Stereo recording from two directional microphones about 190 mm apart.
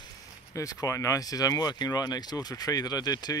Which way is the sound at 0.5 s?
15° left (ahead or behind).